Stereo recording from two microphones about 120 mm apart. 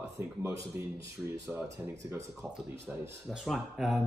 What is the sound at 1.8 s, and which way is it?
Speech, 25° right (ahead or behind).